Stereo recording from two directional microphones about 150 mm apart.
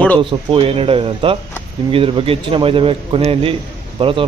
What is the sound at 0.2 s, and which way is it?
A man's voice, 35° right (ahead or behind).